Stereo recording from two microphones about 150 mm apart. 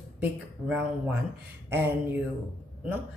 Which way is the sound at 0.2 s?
5° right (ahead or behind).